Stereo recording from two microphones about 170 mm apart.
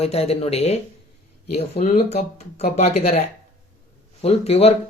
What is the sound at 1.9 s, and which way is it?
Speech, 40° left (ahead or behind).